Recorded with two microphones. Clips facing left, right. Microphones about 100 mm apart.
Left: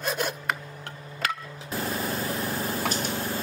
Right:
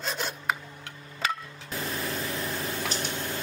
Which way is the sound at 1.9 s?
30° left (ahead or behind).